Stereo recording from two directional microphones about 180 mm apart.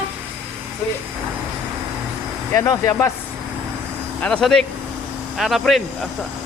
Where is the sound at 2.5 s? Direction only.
20° left (ahead or behind).